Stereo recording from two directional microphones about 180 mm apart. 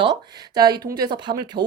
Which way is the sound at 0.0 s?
25° right (ahead or behind).